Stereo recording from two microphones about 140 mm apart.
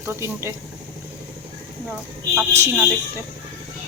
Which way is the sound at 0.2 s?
20° right (ahead or behind).